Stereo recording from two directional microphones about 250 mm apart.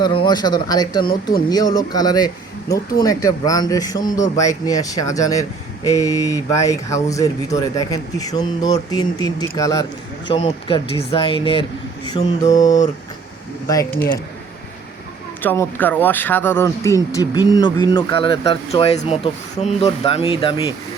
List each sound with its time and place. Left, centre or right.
0.0 s speech: centre
15.4 s speech: centre